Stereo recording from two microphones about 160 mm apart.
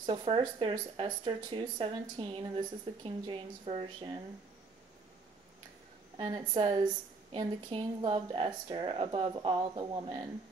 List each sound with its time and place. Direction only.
0.0 s speech: 30° right (ahead or behind)
6.1 s a woman's voice: 30° right (ahead or behind)